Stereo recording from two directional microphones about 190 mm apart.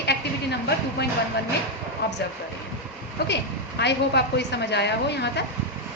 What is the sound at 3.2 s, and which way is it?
A woman's voice, 65° left (ahead or behind).